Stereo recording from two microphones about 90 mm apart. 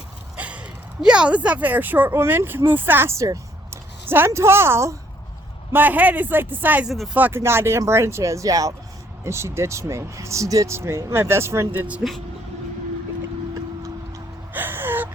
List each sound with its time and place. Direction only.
0.3 s speech: 15° right (ahead or behind); by 4.9 s 30° right (ahead or behind)
5.7 s speech: 20° right (ahead or behind)
6.8 s speech: centre (ahead or behind)
7.1 s speech: 20° right (ahead or behind)
14.5 s gasp: 25° right (ahead or behind)